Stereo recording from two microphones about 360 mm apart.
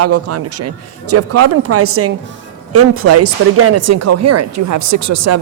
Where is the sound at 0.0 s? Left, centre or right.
Right.